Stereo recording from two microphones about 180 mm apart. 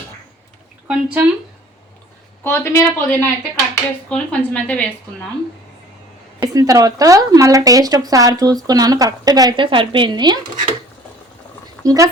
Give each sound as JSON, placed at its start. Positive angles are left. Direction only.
{"t": 0.9, "sound": "speech", "side_deg": -5}
{"t": 2.4, "sound": "speech", "side_deg": 15}
{"t": 6.4, "sound": "speech", "side_deg": -20}
{"t": 11.8, "sound": "speech", "side_deg": -20}